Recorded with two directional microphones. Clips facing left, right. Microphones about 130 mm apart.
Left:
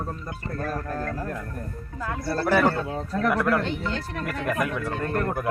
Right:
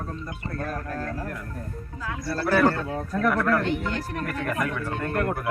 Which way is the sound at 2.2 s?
25° left (ahead or behind).